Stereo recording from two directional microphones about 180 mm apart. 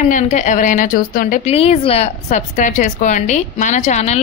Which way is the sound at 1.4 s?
35° left (ahead or behind).